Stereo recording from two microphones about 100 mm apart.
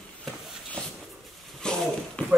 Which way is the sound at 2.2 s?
15° left (ahead or behind).